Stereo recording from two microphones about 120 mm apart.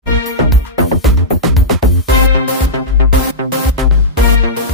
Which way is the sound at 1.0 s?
Centre (ahead or behind).